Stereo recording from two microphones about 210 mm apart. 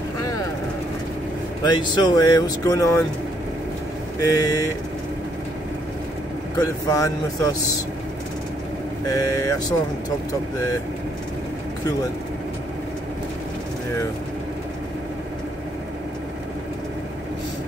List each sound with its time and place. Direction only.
1.6 s speech: 20° left (ahead or behind)
4.4 s speech: 15° left (ahead or behind)
6.6 s speech: 15° left (ahead or behind)
9.0 s speech: 15° left (ahead or behind)